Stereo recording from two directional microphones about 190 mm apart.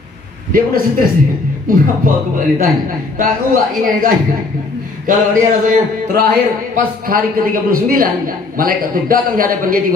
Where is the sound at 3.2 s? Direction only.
45° right (ahead or behind).